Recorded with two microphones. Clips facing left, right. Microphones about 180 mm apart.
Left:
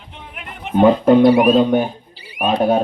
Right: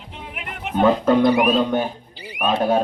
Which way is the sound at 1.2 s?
30° left (ahead or behind).